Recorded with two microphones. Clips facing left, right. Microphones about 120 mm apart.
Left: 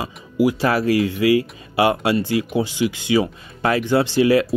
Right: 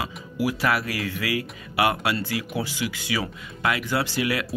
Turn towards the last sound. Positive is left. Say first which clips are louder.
# left 10 dB
turn(degrees=30)  # may be behind; listen again after turning